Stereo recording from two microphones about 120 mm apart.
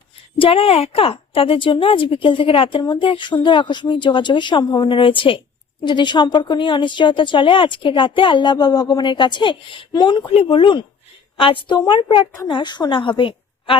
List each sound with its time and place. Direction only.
0.3 s a woman's voice: 50° left (ahead or behind)